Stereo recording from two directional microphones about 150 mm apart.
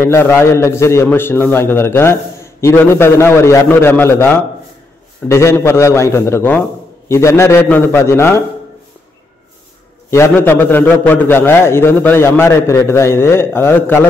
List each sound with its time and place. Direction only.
0.0 s a man's voice: 15° left (ahead or behind)
10.1 s a man's voice: 15° left (ahead or behind)